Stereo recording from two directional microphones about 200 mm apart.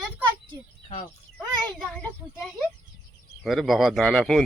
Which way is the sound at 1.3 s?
5° left (ahead or behind).